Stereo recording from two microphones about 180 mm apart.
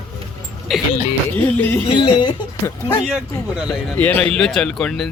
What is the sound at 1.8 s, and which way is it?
Speech, 25° left (ahead or behind).